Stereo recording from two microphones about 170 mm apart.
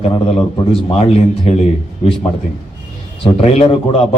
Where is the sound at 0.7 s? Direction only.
35° left (ahead or behind).